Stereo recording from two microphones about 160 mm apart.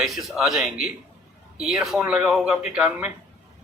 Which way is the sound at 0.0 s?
Centre (ahead or behind).